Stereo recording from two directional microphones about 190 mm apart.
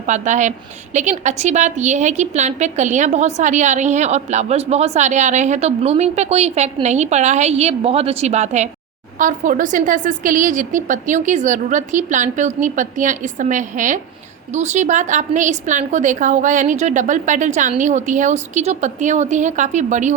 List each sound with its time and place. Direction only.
0.0 s a woman's voice: 40° right (ahead or behind)